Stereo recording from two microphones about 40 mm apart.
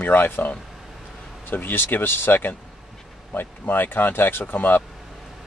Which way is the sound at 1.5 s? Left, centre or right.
Left.